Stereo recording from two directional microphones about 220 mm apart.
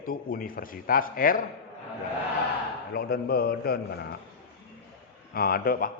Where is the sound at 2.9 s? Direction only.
45° left (ahead or behind).